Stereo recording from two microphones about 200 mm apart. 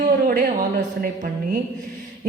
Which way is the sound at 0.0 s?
45° right (ahead or behind).